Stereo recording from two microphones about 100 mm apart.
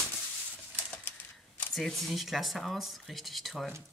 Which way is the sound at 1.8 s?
Centre (ahead or behind).